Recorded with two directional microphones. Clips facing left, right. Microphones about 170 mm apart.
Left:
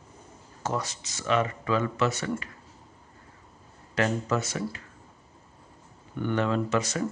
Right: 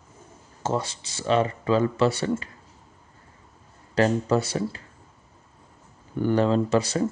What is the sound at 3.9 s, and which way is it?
Speech, 30° right (ahead or behind).